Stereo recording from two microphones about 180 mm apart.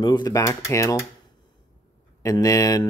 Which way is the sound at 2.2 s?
20° left (ahead or behind).